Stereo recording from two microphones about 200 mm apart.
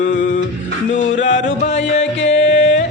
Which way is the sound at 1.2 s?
40° left (ahead or behind).